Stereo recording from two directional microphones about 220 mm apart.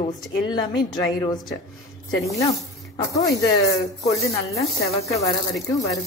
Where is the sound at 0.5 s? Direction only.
15° left (ahead or behind).